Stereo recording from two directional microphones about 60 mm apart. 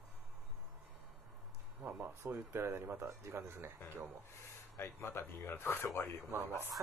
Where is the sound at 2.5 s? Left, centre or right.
Right.